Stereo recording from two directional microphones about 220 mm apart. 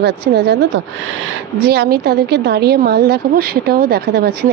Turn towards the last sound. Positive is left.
turn(degrees=-45)  # may be behind; listen again after turning